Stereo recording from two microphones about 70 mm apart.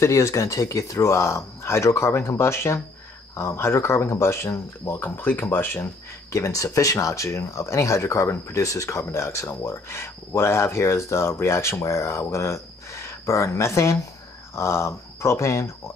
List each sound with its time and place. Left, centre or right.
0.0 s speech: left
6.3 s speech: left